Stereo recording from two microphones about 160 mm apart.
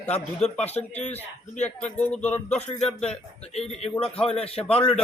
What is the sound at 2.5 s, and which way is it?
A man's voice, 45° left (ahead or behind).